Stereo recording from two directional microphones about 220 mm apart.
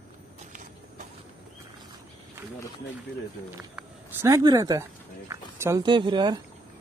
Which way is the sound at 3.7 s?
15° right (ahead or behind).